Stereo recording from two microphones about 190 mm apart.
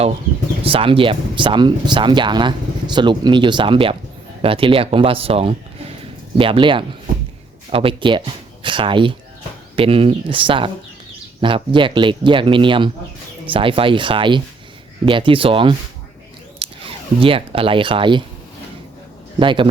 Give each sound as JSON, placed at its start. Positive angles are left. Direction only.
{"t": 0.6, "sound": "speech", "side_deg": -30}
{"t": 19.4, "sound": "speech", "side_deg": -25}